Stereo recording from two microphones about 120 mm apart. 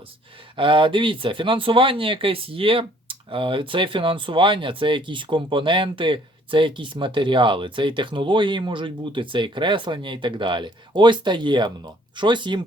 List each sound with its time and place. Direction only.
0.5 s speech: 45° right (ahead or behind)